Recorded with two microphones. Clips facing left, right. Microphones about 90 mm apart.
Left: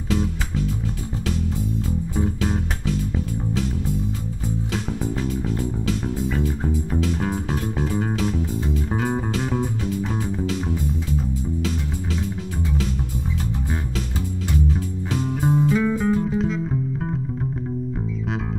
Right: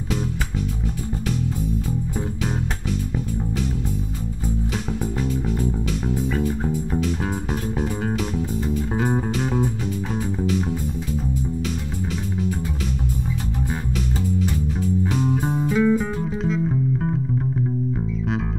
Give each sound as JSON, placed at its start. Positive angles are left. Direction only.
{"t": 6.3, "sound": "music", "side_deg": 0}
{"t": 8.9, "sound": "music", "side_deg": -5}
{"t": 15.4, "sound": "music", "side_deg": -20}
{"t": 15.7, "sound": "music", "side_deg": -5}